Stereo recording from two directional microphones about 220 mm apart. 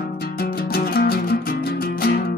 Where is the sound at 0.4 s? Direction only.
45° left (ahead or behind).